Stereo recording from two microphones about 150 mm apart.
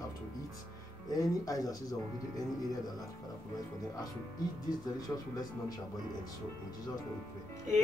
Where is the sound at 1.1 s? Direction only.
25° left (ahead or behind).